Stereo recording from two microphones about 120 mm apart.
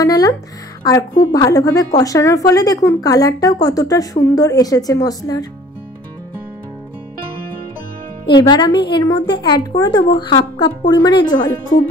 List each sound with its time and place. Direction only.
0.0 s a woman's voice: 30° left (ahead or behind)
1.3 s a woman's voice: 30° left (ahead or behind)
8.3 s a woman's voice: 35° left (ahead or behind)